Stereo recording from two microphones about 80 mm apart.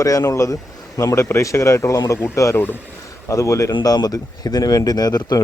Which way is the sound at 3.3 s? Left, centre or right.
Left.